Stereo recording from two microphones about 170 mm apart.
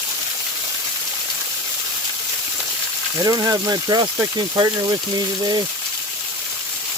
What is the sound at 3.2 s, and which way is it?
Speech, 20° right (ahead or behind).